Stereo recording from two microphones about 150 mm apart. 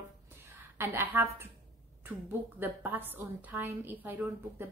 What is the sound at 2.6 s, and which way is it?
A woman's voice, 10° right (ahead or behind).